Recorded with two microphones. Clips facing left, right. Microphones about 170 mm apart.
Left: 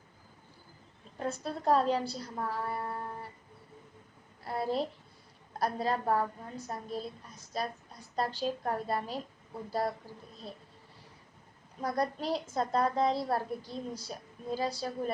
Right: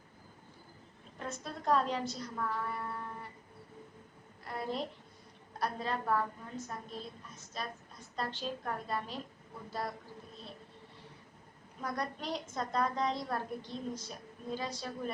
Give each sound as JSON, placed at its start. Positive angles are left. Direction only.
{"t": 1.2, "sound": "a woman's voice", "side_deg": 35}
{"t": 4.4, "sound": "a sound", "side_deg": 35}
{"t": 5.5, "sound": "a woman's voice", "side_deg": 40}
{"t": 11.8, "sound": "a woman's voice", "side_deg": 35}